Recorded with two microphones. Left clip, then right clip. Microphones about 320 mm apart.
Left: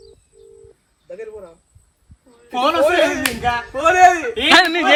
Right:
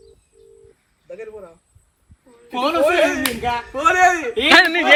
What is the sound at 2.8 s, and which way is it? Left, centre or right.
Speech, left.